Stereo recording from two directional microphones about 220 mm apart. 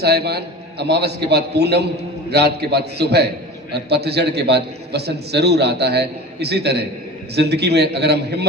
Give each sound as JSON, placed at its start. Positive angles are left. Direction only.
{"t": 0.0, "sound": "a man's voice", "side_deg": -45}